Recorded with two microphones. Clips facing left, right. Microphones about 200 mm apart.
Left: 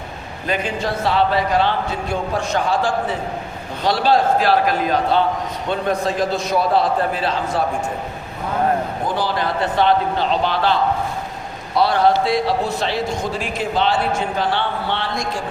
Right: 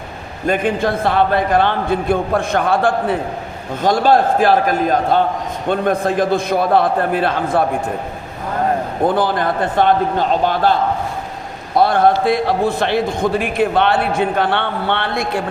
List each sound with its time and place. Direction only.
0.4 s a man's voice: 50° right (ahead or behind)
9.0 s a man's voice: 50° right (ahead or behind)